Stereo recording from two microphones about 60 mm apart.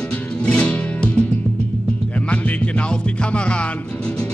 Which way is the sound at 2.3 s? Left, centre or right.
Left.